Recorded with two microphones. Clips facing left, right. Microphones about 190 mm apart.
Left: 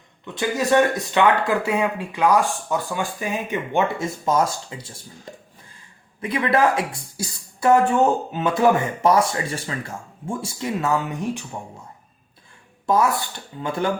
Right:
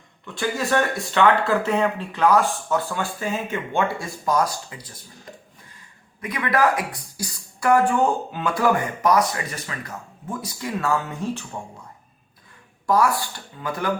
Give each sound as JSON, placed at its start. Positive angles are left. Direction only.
{"t": 0.3, "sound": "speech", "side_deg": 15}
{"t": 6.2, "sound": "speech", "side_deg": 25}
{"t": 12.8, "sound": "speech", "side_deg": 20}